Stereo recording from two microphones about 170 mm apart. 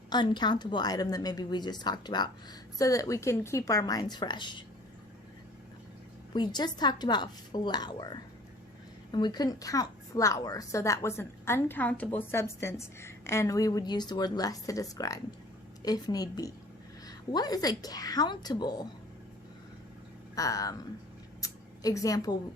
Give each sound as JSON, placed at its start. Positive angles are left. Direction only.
{"t": 0.1, "sound": "a woman's voice", "side_deg": 25}
{"t": 6.3, "sound": "a woman's voice", "side_deg": 25}
{"t": 20.3, "sound": "a woman's voice", "side_deg": 20}
{"t": 21.4, "sound": "a sound", "side_deg": 20}